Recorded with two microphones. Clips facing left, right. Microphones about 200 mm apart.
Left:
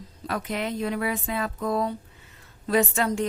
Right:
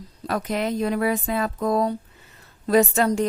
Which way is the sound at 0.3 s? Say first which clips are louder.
Right 4 dB; 40° right (ahead or behind).